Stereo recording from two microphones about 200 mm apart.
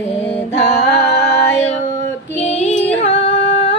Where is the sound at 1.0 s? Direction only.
60° left (ahead or behind).